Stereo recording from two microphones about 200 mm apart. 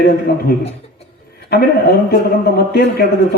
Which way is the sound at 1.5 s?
55° left (ahead or behind).